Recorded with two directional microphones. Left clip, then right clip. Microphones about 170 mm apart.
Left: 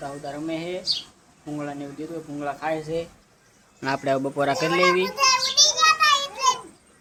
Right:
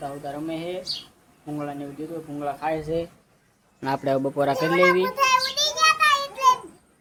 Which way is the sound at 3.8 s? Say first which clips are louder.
Even; 5° right (ahead or behind).